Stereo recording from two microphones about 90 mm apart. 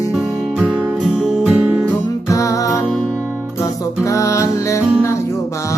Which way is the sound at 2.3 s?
35° left (ahead or behind).